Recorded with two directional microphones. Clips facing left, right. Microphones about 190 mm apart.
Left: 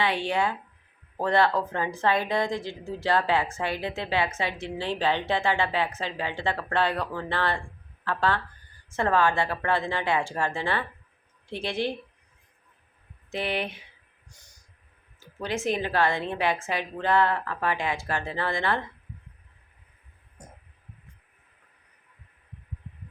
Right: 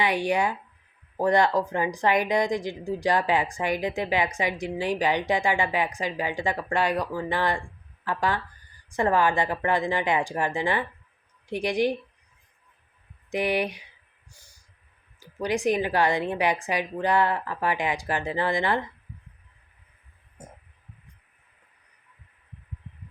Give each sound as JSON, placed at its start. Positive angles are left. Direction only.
{"t": 0.0, "sound": "a woman's voice", "side_deg": -15}
{"t": 13.3, "sound": "a woman's voice", "side_deg": -15}
{"t": 14.3, "sound": "snort", "side_deg": -10}
{"t": 15.2, "sound": "a woman's voice", "side_deg": -15}
{"t": 20.4, "sound": "a sound", "side_deg": -5}